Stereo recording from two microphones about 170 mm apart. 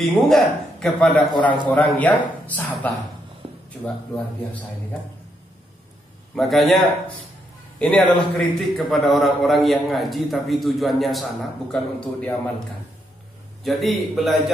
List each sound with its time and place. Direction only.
0.0 s a man's voice: centre (ahead or behind)
3.4 s a sound: 35° right (ahead or behind)
6.3 s a man's voice: centre (ahead or behind)
13.7 s a man's voice: centre (ahead or behind)